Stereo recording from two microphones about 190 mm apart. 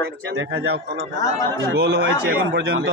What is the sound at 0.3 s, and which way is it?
Speech, 90° right.